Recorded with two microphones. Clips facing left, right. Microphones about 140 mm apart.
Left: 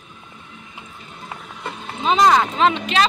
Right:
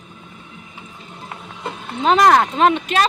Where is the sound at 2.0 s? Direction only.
65° right (ahead or behind); by 3.0 s 50° right (ahead or behind).